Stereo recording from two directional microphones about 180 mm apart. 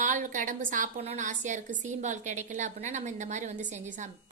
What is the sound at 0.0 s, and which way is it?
A woman's voice, 45° right (ahead or behind).